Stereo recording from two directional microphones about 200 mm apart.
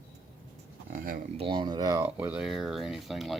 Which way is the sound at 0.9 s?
45° right (ahead or behind).